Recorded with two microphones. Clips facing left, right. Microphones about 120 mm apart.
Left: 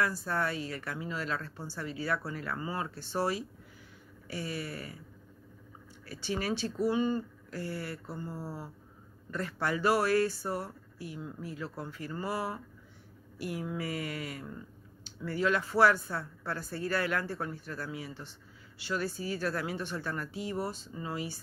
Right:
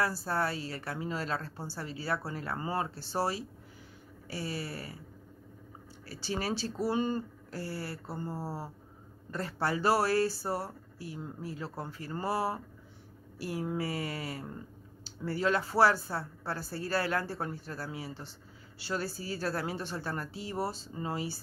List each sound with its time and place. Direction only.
0.0 s a woman's voice: 35° right (ahead or behind)
6.0 s a woman's voice: 35° right (ahead or behind)